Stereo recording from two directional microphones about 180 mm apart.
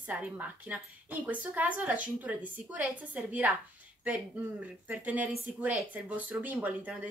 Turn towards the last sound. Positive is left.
turn(degrees=-10)  # may be behind; listen again after turning